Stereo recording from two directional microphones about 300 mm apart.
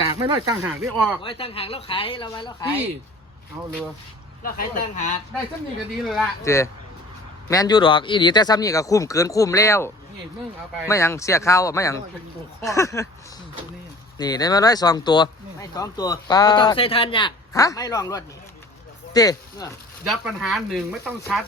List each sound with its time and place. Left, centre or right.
0.2 s speech: centre
1.2 s speech: centre
3.6 s speech: centre
4.4 s speech: left
6.4 s speech: centre
14.2 s speech: centre
20.1 s speech: centre